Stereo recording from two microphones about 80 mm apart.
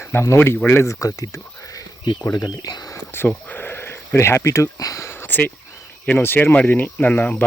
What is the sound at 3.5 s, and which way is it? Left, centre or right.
Speech, left.